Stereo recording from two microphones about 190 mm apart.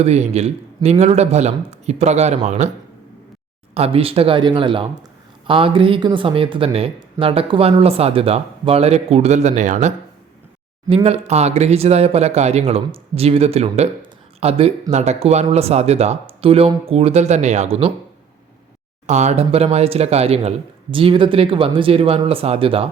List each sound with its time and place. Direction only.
0.0 s speech: 35° right (ahead or behind)
3.8 s speech: 30° right (ahead or behind)
19.0 s speech: 35° right (ahead or behind)